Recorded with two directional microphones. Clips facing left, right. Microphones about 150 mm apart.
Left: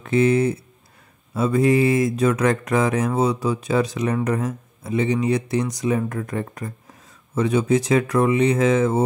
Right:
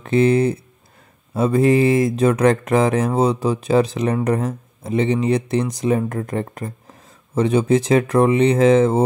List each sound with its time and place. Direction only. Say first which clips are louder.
0.0 s speech: right 2 dB; 30° right (ahead or behind)